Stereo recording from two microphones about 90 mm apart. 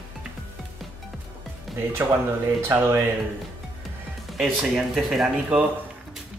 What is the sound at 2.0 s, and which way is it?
Speech, 25° right (ahead or behind).